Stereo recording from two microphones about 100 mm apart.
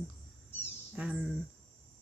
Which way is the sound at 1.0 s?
15° right (ahead or behind).